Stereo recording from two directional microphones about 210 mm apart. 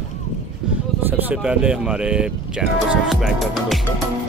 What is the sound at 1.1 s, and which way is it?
Speech, 10° right (ahead or behind).